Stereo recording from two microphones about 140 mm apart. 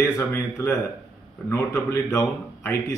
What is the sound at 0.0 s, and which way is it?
A man's voice, 20° left (ahead or behind).